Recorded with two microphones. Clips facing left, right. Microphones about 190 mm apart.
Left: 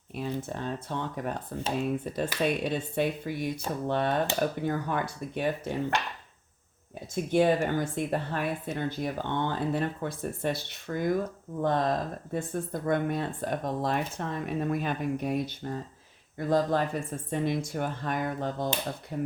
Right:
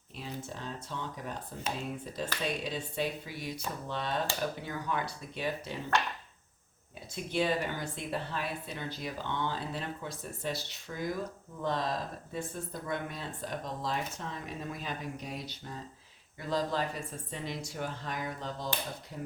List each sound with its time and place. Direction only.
0.2 s speech: 55° left (ahead or behind)
7.1 s speech: 50° left (ahead or behind)